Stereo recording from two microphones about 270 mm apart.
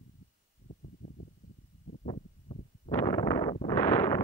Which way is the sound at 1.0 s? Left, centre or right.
Left.